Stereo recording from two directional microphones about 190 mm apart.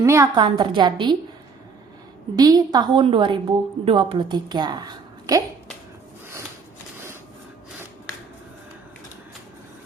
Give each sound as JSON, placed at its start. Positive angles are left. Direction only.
{"t": 0.0, "sound": "a woman's voice", "side_deg": -15}
{"t": 2.3, "sound": "a woman's voice", "side_deg": -20}